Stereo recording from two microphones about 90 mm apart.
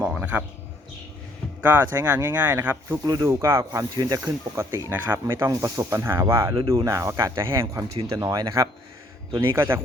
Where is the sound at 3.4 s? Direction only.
30° right (ahead or behind).